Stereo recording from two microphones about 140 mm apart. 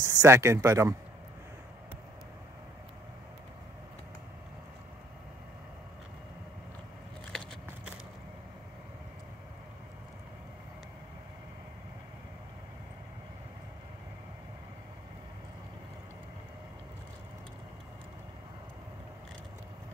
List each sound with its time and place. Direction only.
0.0 s speech: 20° right (ahead or behind)